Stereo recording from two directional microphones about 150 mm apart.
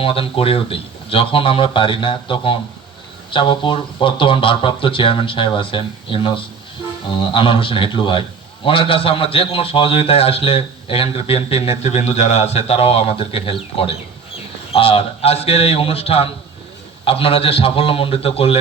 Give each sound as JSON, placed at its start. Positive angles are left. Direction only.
{"t": 0.0, "sound": "a man's voice", "side_deg": 40}